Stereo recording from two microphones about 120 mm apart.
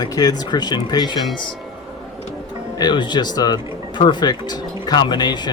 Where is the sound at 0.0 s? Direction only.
35° left (ahead or behind).